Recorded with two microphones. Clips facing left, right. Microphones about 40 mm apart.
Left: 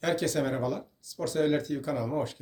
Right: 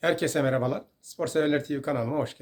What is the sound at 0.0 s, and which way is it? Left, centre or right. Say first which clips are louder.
Speech: right 3 dB; right.